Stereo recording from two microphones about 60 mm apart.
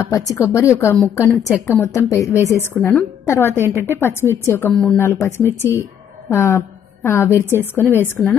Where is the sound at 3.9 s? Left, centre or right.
Left.